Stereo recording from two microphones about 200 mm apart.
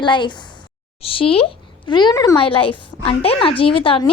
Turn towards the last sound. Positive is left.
turn(degrees=25)  # may be behind; listen again after turning